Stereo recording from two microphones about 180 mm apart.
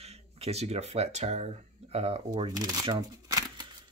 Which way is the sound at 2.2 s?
20° right (ahead or behind).